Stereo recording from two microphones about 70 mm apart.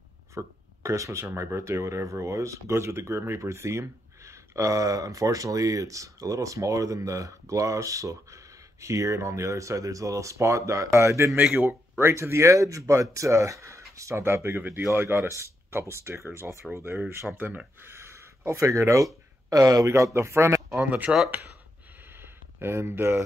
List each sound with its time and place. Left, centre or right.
0.3 s a man's voice: right
17.8 s a sound: right
19.5 s speech: right
19.9 s a man's voice: right
20.8 s speech: right
22.1 s a sound: right